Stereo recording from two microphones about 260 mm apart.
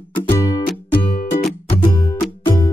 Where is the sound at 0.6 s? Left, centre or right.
Left.